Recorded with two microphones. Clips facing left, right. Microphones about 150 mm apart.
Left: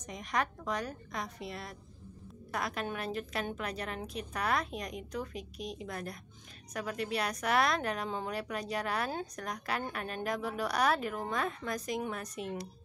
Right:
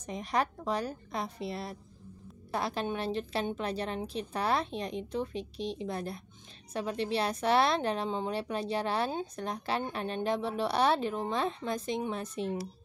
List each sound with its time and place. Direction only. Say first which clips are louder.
0.0 s a woman's voice: right 3 dB; 30° right (ahead or behind)